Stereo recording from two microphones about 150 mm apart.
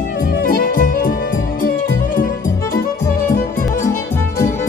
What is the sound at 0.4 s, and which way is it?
Music, 70° left (ahead or behind).